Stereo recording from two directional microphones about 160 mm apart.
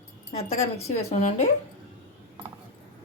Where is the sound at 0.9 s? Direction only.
40° left (ahead or behind).